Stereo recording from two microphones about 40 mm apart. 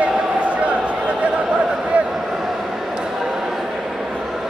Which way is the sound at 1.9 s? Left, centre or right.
Right.